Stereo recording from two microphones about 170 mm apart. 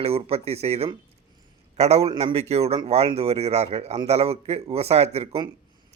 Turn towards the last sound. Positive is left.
turn(degrees=-35)  # may be behind; listen again after turning